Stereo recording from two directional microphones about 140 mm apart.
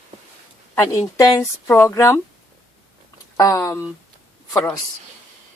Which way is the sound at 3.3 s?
25° left (ahead or behind).